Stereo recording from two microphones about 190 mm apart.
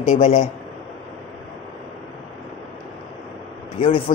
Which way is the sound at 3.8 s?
30° left (ahead or behind).